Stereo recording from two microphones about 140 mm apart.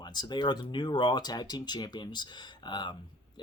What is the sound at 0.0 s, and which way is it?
Speech, 30° left (ahead or behind).